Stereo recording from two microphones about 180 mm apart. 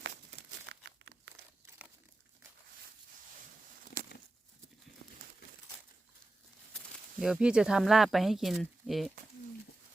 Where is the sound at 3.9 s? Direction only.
45° left (ahead or behind).